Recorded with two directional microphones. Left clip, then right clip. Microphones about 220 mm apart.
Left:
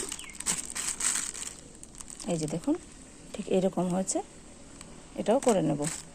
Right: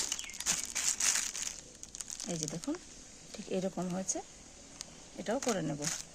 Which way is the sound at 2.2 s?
25° left (ahead or behind).